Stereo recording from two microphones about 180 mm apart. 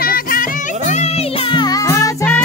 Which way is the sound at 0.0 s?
55° left (ahead or behind).